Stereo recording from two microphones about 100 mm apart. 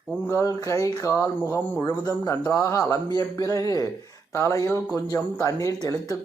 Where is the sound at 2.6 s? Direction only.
30° left (ahead or behind).